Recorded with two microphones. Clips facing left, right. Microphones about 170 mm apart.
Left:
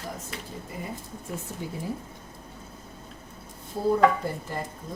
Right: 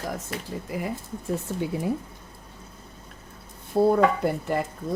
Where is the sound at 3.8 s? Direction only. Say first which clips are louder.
Right 7 dB; 65° right (ahead or behind).